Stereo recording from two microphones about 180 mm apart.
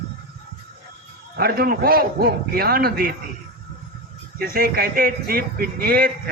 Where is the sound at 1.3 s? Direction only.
55° right (ahead or behind).